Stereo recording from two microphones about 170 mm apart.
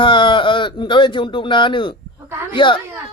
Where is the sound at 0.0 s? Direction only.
30° left (ahead or behind).